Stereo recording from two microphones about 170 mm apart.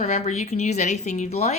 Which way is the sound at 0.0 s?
40° left (ahead or behind).